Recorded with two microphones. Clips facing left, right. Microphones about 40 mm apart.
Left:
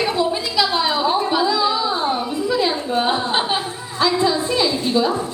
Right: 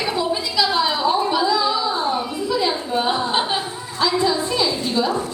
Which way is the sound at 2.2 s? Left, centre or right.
Centre.